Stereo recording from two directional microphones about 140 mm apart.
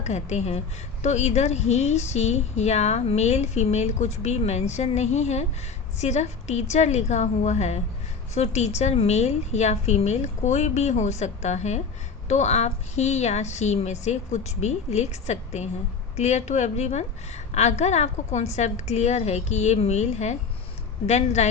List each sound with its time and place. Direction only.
0.0 s a woman's voice: 55° left (ahead or behind)